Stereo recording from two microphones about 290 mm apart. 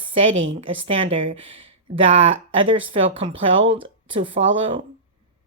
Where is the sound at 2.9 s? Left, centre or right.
Centre.